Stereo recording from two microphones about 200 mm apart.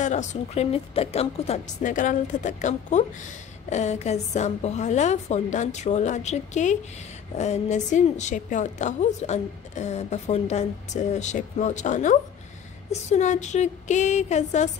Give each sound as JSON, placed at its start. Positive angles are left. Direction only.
{"t": 0.0, "sound": "a woman's voice", "side_deg": 35}